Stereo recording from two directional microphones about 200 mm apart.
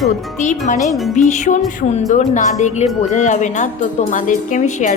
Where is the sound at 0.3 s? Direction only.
35° left (ahead or behind).